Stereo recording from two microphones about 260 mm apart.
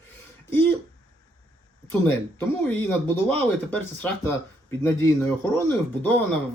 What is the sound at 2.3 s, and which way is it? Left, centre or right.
Speech, centre.